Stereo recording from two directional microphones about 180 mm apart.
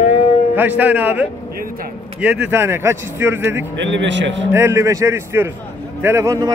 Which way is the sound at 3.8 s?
90° right.